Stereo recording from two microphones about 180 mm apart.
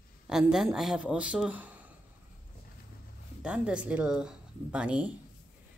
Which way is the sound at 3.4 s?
5° right (ahead or behind).